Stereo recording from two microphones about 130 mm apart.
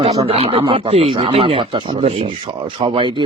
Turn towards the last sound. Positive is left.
turn(degrees=-40)  # may be behind; listen again after turning